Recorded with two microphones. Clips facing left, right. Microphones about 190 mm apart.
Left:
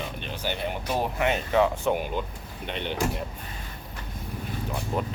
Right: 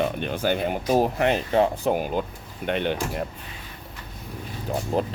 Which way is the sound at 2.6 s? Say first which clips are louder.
Right 9 dB; 60° right (ahead or behind).